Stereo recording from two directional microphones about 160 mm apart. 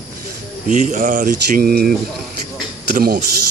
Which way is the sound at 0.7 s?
50° right (ahead or behind).